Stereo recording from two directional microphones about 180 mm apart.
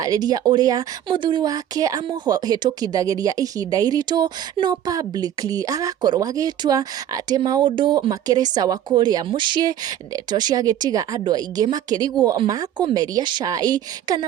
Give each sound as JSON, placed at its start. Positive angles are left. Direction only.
{"t": 0.0, "sound": "speech", "side_deg": -20}